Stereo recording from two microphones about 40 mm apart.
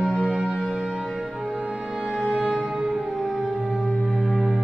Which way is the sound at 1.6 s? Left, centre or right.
Centre.